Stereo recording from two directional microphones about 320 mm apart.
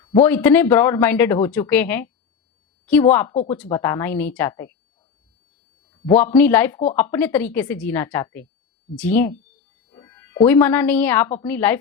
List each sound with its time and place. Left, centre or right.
0.0 s a woman's voice: centre
6.1 s a woman's voice: centre